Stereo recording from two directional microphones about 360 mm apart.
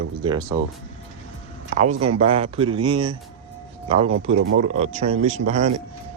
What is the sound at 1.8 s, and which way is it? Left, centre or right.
Speech, centre.